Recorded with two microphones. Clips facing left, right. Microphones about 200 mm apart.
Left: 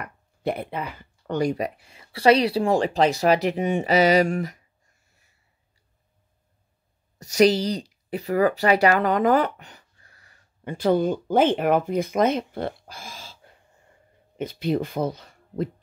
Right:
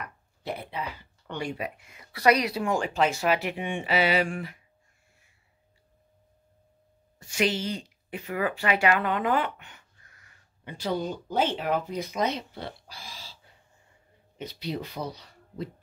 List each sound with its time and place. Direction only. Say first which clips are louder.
0.0 s speech: left 10 dB; 55° left (ahead or behind)
7.2 s speech: left 9 dB; 40° left (ahead or behind)
10.6 s speech: left 9 dB; 50° left (ahead or behind)